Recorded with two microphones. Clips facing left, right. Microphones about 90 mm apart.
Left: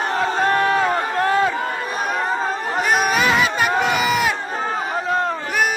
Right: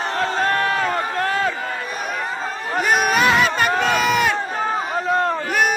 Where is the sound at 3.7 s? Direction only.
5° left (ahead or behind).